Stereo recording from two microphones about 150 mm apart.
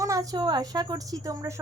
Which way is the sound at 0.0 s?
20° right (ahead or behind).